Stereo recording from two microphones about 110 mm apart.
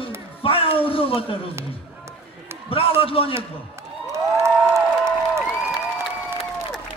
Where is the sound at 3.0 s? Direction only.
55° left (ahead or behind).